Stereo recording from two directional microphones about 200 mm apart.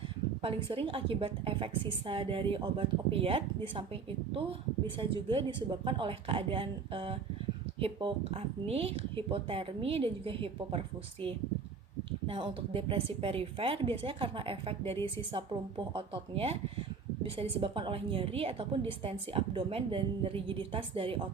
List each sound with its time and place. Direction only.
0.4 s a woman's voice: 30° right (ahead or behind)
4.9 s a woman's voice: 25° right (ahead or behind)
12.3 s a woman's voice: 25° right (ahead or behind)
16.0 s a woman's voice: 30° right (ahead or behind)